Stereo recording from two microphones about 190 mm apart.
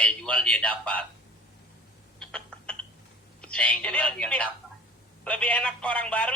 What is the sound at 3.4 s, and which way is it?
A woman's voice, 5° left (ahead or behind).